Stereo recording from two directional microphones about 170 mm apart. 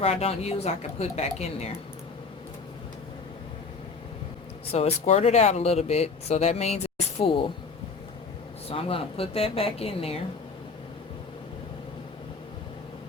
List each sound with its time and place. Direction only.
0.0 s speech: 35° left (ahead or behind)
4.7 s speech: 35° left (ahead or behind)
8.7 s speech: 35° left (ahead or behind)